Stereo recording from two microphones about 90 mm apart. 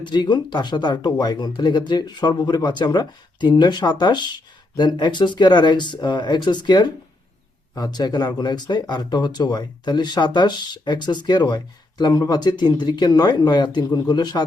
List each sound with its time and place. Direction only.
0.0 s speech: 55° left (ahead or behind)